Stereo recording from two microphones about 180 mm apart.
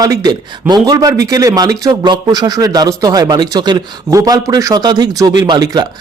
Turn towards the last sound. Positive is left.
turn(degrees=-20)  # may be behind; listen again after turning